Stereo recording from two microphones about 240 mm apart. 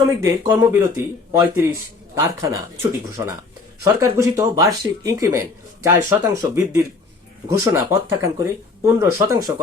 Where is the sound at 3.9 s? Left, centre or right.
Centre.